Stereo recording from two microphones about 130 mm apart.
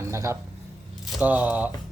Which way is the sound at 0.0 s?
20° right (ahead or behind).